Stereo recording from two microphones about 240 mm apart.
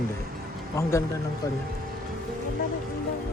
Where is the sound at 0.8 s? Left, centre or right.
Centre.